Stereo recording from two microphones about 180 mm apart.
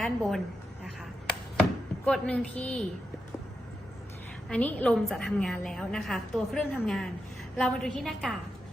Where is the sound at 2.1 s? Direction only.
5° left (ahead or behind).